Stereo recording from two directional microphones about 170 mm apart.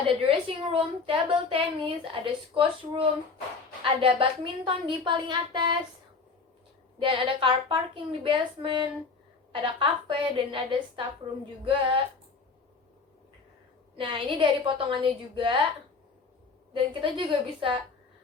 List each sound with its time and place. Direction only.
0.2 s a woman's voice: 30° right (ahead or behind)
7.0 s a woman's voice: 30° right (ahead or behind)
13.9 s a woman's voice: 30° right (ahead or behind)
16.9 s a woman's voice: 30° right (ahead or behind)